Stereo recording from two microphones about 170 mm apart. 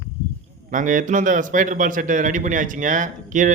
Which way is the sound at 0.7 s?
50° right (ahead or behind).